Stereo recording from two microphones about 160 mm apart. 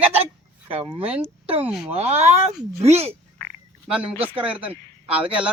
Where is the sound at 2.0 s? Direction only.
40° right (ahead or behind).